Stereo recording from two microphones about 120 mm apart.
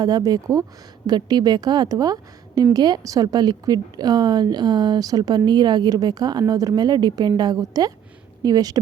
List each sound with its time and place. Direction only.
0.0 s a woman's voice: 30° right (ahead or behind)